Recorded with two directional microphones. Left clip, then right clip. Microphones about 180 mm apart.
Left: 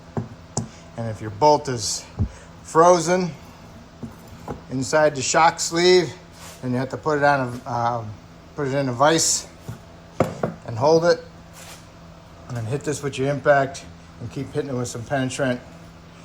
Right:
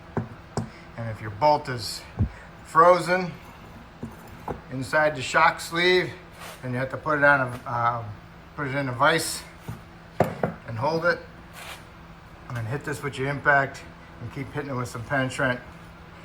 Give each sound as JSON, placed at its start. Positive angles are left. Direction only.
{"t": 1.2, "sound": "speech", "side_deg": 15}
{"t": 4.4, "sound": "speech", "side_deg": 15}
{"t": 10.8, "sound": "speech", "side_deg": 20}
{"t": 12.5, "sound": "speech", "side_deg": 10}